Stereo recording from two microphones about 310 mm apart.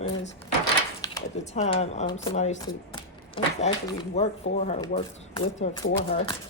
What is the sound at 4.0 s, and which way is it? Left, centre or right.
Speech, centre.